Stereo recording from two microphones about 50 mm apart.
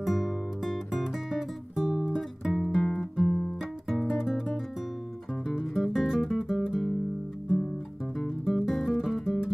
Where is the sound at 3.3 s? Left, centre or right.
Left.